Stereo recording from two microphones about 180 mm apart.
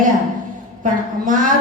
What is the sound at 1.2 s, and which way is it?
Speech, 45° right (ahead or behind).